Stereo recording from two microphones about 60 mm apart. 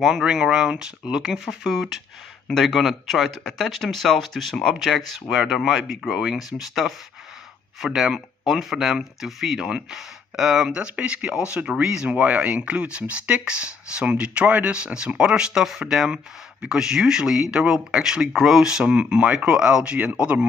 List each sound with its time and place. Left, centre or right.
0.0 s speech: centre